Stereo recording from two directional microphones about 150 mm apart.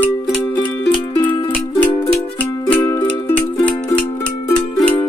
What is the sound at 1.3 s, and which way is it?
Music, 30° left (ahead or behind).